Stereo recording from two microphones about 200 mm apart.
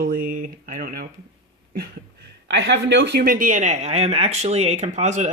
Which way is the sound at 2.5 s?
60° right (ahead or behind).